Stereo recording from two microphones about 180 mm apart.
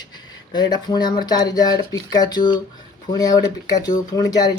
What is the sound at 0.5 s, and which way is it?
Speech, 25° left (ahead or behind).